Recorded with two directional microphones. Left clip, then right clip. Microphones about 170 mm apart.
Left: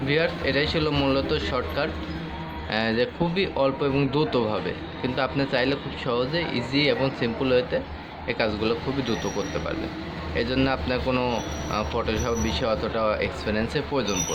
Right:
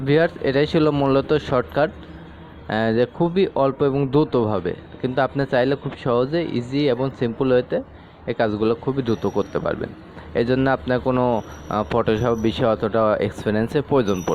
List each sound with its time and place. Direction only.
0.1 s speech: 50° right (ahead or behind)